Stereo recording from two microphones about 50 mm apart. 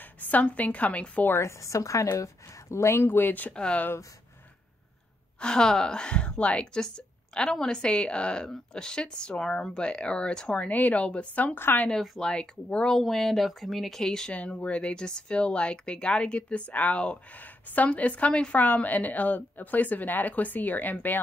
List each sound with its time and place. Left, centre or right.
0.2 s speech: left
1.4 s a woman's voice: left
5.4 s a woman's voice: centre
9.4 s speech: centre
9.8 s speech: centre
10.7 s a woman's voice: left
11.0 s speech: left
11.5 s a woman's voice: left
11.9 s a woman's voice: centre
12.6 s speech: left
12.9 s speech: centre
14.0 s a woman's voice: centre
14.3 s a woman's voice: left